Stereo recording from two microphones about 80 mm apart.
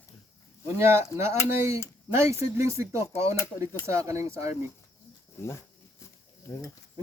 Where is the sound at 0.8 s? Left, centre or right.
Right.